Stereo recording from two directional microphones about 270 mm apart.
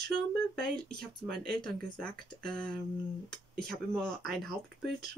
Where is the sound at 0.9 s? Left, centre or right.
Right.